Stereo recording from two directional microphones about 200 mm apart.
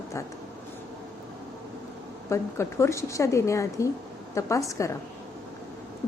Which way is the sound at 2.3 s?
15° left (ahead or behind).